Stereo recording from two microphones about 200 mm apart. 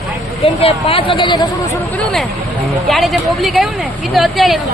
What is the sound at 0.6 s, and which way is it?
Speech, 30° left (ahead or behind).